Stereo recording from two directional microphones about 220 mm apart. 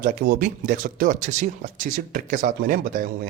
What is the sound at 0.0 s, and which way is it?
Speech, 40° right (ahead or behind).